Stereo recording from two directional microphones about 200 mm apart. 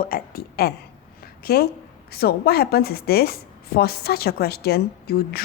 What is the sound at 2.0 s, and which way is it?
A woman's voice, 50° left (ahead or behind).